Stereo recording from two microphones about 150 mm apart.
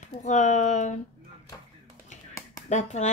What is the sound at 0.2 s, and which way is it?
Speech, 55° left (ahead or behind).